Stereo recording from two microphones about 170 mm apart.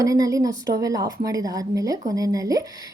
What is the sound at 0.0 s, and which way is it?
A woman's voice, 20° right (ahead or behind).